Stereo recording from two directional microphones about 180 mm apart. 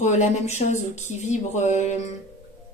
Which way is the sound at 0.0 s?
40° left (ahead or behind).